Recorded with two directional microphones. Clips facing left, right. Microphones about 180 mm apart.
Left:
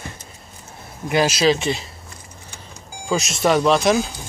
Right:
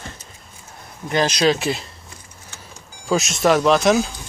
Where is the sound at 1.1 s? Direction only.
5° left (ahead or behind).